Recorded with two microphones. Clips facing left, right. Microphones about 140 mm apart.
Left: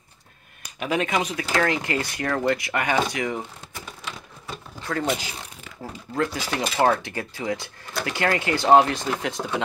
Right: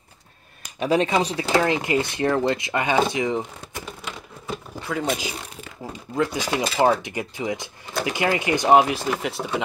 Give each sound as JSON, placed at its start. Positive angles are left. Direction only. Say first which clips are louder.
{"t": 0.7, "sound": "speech", "louder": "right 4 dB", "side_deg": -30}
{"t": 4.8, "sound": "speech", "louder": "even", "side_deg": -10}